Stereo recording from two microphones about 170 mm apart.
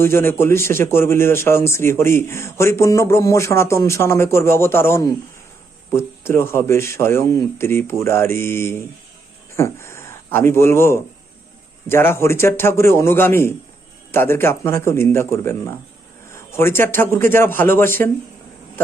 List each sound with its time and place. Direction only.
0.0 s a man's voice: 15° left (ahead or behind)